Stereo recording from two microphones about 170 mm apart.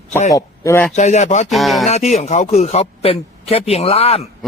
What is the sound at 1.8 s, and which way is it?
Speech, 40° left (ahead or behind).